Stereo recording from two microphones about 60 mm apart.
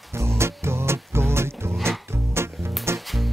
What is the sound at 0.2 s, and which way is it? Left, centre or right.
Music, right.